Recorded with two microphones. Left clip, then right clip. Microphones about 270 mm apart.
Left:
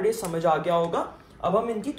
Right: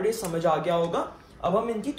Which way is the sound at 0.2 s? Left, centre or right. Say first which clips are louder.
Left 1 dB; left.